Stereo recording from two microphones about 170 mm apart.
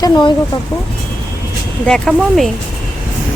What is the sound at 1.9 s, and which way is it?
Speech, centre (ahead or behind).